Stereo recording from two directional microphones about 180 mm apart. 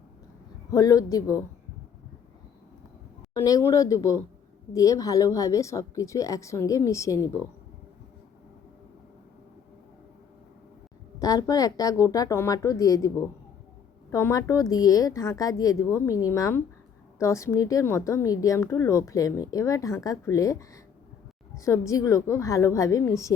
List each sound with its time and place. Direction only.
0.7 s a woman's voice: 20° left (ahead or behind)
3.3 s speech: 15° left (ahead or behind)
11.2 s a woman's voice: 20° left (ahead or behind)